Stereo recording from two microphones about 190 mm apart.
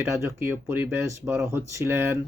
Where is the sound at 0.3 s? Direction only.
10° right (ahead or behind).